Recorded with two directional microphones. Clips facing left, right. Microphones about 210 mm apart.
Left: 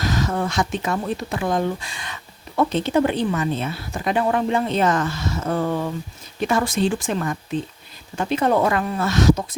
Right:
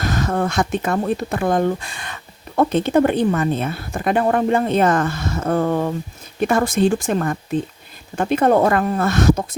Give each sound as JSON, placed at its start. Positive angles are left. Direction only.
{"t": 0.0, "sound": "speech", "side_deg": -55}